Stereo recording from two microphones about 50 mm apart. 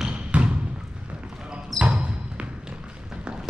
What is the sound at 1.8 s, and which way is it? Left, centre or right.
Basketball bounce, centre.